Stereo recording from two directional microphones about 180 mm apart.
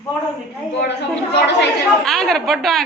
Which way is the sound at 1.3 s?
70° left (ahead or behind).